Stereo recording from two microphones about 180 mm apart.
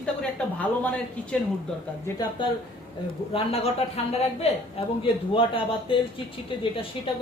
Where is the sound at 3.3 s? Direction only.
35° left (ahead or behind).